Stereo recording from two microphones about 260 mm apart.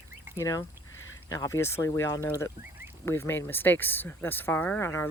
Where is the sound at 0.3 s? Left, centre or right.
Centre.